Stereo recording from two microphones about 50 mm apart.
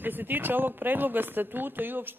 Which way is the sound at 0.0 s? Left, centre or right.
Right.